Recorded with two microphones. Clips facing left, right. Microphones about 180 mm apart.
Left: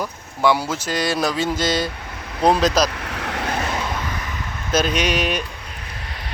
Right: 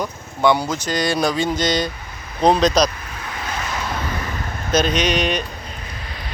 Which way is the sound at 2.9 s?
75° left (ahead or behind).